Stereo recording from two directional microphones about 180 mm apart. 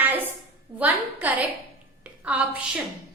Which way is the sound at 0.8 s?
10° right (ahead or behind).